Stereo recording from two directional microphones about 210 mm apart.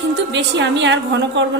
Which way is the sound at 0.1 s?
60° right (ahead or behind).